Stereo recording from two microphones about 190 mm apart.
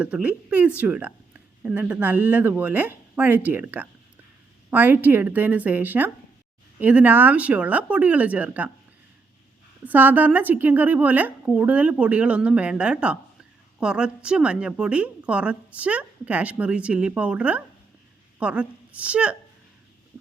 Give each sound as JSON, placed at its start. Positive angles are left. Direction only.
{"t": 0.0, "sound": "a woman's voice", "side_deg": -5}
{"t": 9.8, "sound": "a woman's voice", "side_deg": -10}